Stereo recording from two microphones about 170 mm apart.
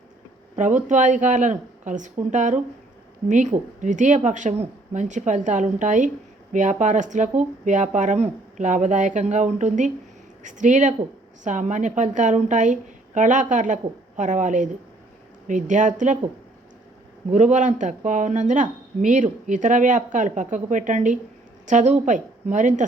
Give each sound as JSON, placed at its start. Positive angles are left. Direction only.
{"t": 0.5, "sound": "speech", "side_deg": -45}
{"t": 17.3, "sound": "speech", "side_deg": -45}